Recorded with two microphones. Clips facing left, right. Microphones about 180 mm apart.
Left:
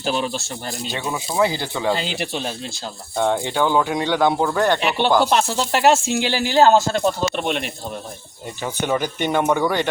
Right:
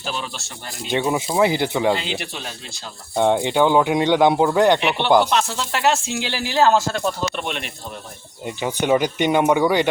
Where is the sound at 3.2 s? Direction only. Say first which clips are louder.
Right 3 dB; 20° right (ahead or behind).